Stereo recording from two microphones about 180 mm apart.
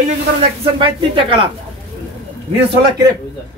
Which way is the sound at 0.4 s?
30° right (ahead or behind).